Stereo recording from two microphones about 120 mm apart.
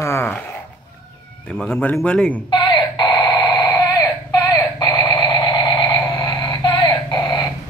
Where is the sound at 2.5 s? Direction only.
40° left (ahead or behind).